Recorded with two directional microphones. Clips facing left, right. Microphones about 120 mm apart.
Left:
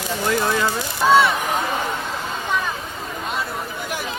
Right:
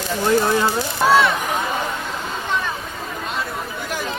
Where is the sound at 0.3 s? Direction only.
25° right (ahead or behind).